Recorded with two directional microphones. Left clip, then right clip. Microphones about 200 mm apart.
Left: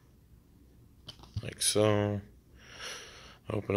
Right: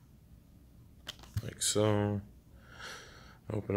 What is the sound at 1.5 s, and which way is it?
Speech, 10° left (ahead or behind).